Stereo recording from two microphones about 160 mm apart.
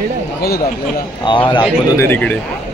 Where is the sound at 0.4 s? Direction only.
75° left (ahead or behind).